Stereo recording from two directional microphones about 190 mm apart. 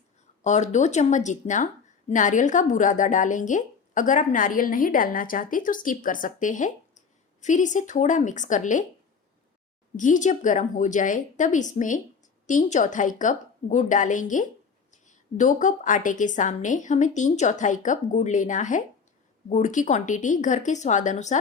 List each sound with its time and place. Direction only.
0.4 s a woman's voice: 40° left (ahead or behind)
10.0 s a woman's voice: 40° left (ahead or behind)